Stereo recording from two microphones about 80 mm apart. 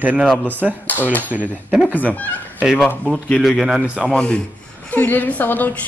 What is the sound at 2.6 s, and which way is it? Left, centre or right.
A man's voice, centre.